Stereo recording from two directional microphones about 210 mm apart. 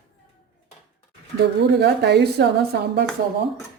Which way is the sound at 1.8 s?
50° right (ahead or behind).